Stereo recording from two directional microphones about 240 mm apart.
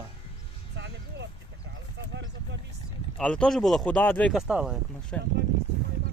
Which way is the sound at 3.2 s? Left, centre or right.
Centre.